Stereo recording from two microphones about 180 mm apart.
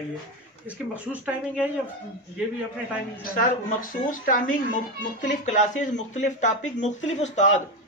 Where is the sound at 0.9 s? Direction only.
5° right (ahead or behind).